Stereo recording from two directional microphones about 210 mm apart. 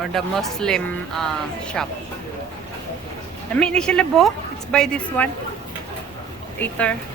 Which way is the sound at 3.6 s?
5° left (ahead or behind).